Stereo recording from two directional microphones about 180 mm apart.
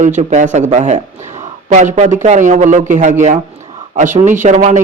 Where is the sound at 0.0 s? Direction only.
40° right (ahead or behind).